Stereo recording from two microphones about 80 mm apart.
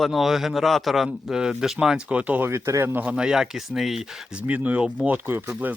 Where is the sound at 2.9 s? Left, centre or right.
Right.